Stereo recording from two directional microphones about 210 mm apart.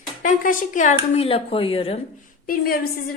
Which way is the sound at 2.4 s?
45° left (ahead or behind).